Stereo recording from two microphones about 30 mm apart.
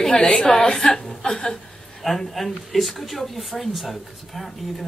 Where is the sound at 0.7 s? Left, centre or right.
Centre.